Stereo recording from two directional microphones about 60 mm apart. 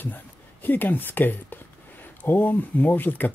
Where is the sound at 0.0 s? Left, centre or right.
Left.